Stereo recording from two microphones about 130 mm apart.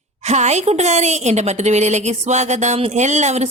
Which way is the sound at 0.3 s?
60° right (ahead or behind).